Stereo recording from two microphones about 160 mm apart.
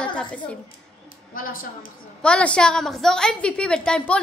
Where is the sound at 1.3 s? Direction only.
65° left (ahead or behind).